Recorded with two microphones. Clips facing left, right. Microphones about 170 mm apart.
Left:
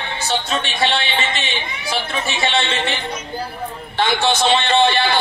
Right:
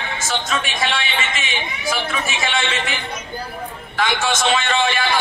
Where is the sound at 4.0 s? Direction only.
30° left (ahead or behind).